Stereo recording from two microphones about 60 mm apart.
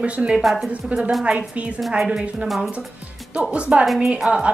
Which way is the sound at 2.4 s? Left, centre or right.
Centre.